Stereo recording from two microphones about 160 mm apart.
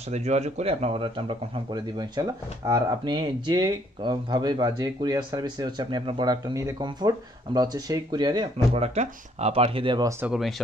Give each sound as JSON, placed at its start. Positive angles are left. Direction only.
{"t": 0.1, "sound": "speech", "side_deg": -45}
{"t": 8.7, "sound": "speech", "side_deg": -40}
{"t": 10.2, "sound": "speech", "side_deg": -5}